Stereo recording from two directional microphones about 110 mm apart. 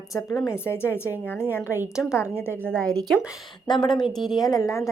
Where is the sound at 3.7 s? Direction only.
45° left (ahead or behind).